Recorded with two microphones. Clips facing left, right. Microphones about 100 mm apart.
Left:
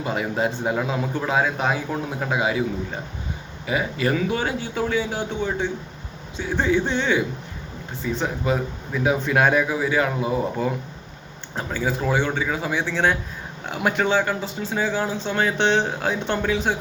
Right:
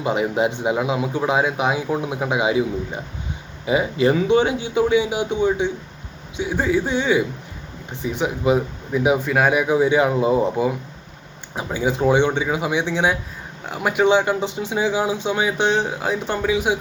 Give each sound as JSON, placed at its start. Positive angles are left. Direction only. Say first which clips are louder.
{"t": 0.0, "sound": "a man's voice", "louder": "right 4 dB", "side_deg": -20}
{"t": 9.2, "sound": "speech", "louder": "right 1 dB", "side_deg": -5}
{"t": 9.6, "sound": "speech", "louder": "right 5 dB", "side_deg": -25}
{"t": 11.5, "sound": "a man's voice", "louder": "right 3 dB", "side_deg": -15}
{"t": 13.7, "sound": "speech", "louder": "even", "side_deg": 0}
{"t": 14.0, "sound": "a man's voice", "louder": "right 7 dB", "side_deg": -20}